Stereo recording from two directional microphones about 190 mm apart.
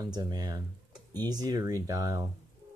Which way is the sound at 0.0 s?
20° right (ahead or behind).